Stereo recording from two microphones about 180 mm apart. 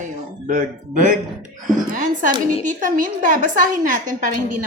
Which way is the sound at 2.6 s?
45° right (ahead or behind).